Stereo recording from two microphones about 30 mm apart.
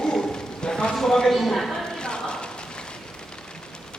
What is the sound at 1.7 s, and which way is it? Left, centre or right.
Rain on surface, left.